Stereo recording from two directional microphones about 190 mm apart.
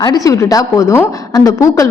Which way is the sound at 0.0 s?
20° left (ahead or behind).